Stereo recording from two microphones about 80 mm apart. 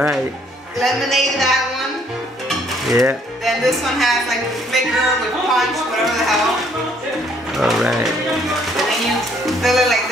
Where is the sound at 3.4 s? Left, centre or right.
Centre.